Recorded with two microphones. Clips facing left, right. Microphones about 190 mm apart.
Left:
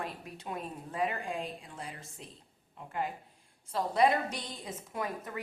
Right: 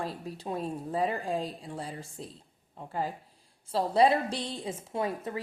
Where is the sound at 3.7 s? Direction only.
30° right (ahead or behind).